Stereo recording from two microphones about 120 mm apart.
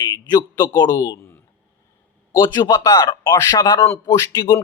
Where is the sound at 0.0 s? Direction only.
35° left (ahead or behind).